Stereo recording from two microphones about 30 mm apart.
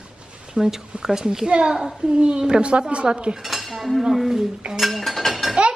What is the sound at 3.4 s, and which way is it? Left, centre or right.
Cutlery, centre.